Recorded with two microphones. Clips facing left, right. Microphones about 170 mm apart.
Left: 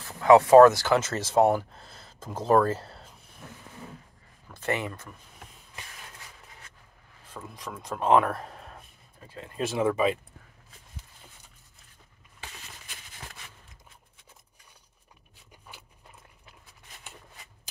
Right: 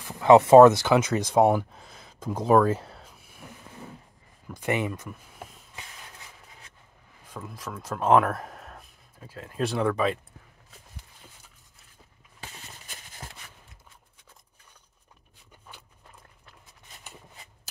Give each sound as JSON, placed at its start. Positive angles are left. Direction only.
{"t": 0.0, "sound": "speech", "side_deg": -25}
{"t": 1.4, "sound": "speech", "side_deg": 0}
{"t": 1.7, "sound": "a sound", "side_deg": -10}
{"t": 4.6, "sound": "speech", "side_deg": -15}
{"t": 7.3, "sound": "speech", "side_deg": 0}